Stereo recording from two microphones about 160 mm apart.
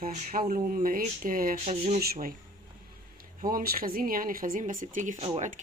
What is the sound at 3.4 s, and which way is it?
Speech, 65° right (ahead or behind).